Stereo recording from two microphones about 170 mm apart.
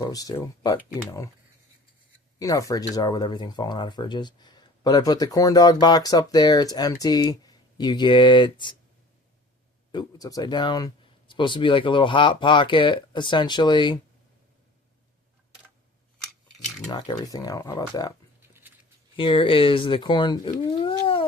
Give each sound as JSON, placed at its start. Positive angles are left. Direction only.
{"t": 0.0, "sound": "speech", "side_deg": 20}
{"t": 2.4, "sound": "speech", "side_deg": 20}
{"t": 9.9, "sound": "speech", "side_deg": 25}
{"t": 16.2, "sound": "a sound", "side_deg": 5}
{"t": 16.9, "sound": "speech", "side_deg": 25}
{"t": 19.1, "sound": "speech", "side_deg": 30}